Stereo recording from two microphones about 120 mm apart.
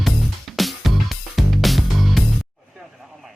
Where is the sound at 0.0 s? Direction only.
Centre (ahead or behind).